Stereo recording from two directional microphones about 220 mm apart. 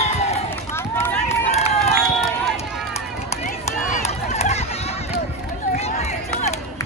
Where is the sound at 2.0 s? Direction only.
Centre (ahead or behind).